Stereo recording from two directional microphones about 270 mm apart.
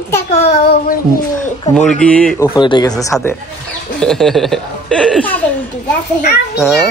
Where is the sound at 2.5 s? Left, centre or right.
Centre.